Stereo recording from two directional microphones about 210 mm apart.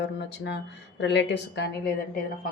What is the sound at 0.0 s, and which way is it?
A woman's voice, 55° left (ahead or behind).